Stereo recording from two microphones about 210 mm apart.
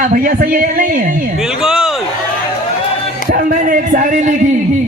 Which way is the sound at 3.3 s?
40° right (ahead or behind).